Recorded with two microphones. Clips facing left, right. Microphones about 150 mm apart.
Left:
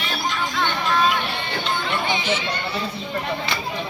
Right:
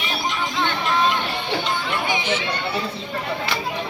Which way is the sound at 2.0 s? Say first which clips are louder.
Even; 15° right (ahead or behind).